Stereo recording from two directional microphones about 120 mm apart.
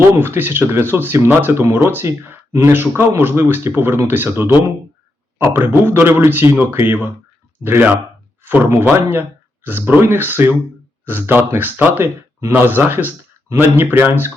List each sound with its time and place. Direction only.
0.0 s speech: 15° right (ahead or behind)